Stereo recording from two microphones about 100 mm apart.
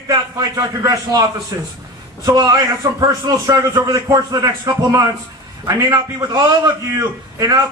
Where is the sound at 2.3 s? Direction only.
40° right (ahead or behind).